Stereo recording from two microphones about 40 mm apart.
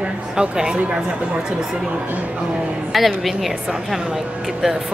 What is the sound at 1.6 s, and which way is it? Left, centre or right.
Speech, centre.